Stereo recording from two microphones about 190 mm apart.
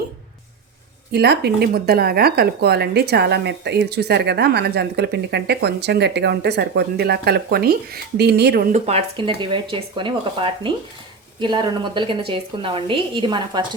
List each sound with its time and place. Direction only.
1.1 s speech: 60° right (ahead or behind)
8.7 s a woman's voice: 35° right (ahead or behind)